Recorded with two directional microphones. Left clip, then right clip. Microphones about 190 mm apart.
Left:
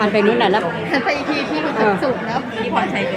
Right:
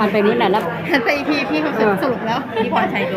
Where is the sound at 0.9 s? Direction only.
50° right (ahead or behind).